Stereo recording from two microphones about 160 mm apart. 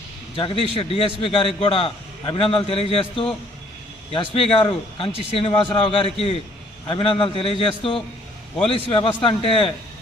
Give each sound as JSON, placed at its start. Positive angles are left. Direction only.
{"t": 0.3, "sound": "a man's voice", "side_deg": 35}